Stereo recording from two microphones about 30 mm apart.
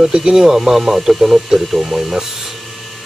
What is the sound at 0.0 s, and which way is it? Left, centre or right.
Speech, right.